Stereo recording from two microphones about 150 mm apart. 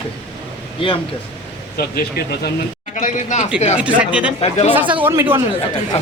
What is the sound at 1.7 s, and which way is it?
Speech, 90° left.